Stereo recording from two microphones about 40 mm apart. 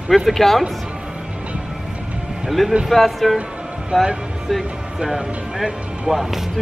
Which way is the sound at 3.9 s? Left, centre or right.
Centre.